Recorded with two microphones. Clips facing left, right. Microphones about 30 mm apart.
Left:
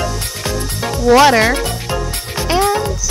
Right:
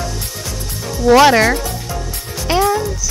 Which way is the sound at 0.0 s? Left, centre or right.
Left.